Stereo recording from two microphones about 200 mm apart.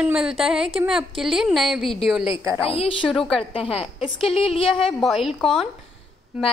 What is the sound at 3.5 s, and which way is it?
A woman's voice, 30° left (ahead or behind).